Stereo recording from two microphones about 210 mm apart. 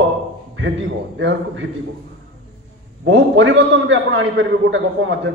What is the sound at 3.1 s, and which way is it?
A man's voice, 65° right (ahead or behind).